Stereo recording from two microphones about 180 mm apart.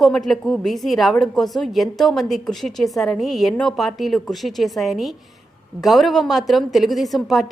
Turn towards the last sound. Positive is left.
turn(degrees=0)  # may be behind; listen again after turning